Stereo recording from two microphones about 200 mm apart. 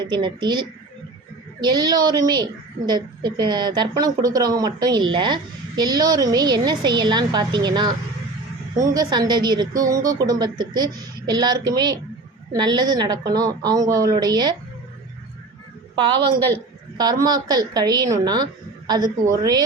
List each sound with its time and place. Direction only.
0.0 s a woman's voice: 20° right (ahead or behind)
17.0 s a woman's voice: 20° right (ahead or behind)